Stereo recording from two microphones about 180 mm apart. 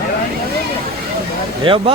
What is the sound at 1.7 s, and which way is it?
Speech, 30° right (ahead or behind).